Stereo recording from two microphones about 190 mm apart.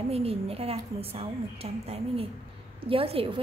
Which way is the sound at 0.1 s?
30° right (ahead or behind).